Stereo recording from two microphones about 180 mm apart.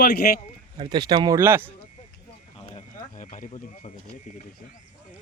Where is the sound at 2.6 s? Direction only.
45° left (ahead or behind).